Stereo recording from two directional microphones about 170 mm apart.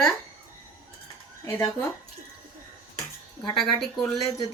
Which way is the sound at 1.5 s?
15° left (ahead or behind).